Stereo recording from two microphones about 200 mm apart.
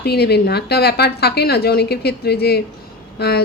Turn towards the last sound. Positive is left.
turn(degrees=55)  # may be behind; listen again after turning